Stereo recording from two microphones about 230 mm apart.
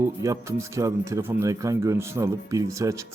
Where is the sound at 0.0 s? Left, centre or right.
Centre.